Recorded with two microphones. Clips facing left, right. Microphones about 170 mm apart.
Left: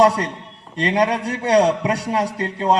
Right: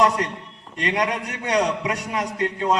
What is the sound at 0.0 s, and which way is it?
A man's voice, 35° left (ahead or behind).